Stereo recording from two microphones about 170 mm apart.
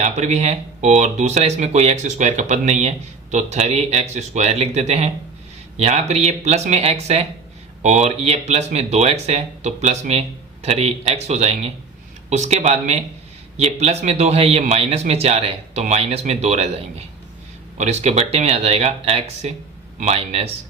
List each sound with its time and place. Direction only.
0.0 s speech: 40° right (ahead or behind)